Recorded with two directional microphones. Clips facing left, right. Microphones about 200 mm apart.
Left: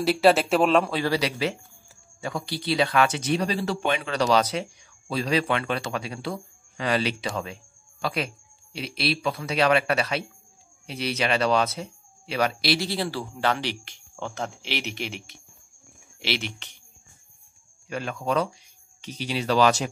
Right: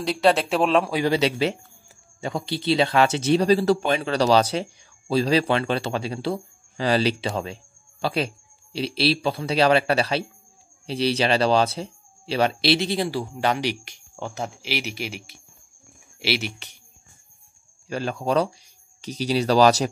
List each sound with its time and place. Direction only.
0.0 s speech: 5° left (ahead or behind)
0.9 s speech: 20° right (ahead or behind)
17.8 s speech: 35° right (ahead or behind)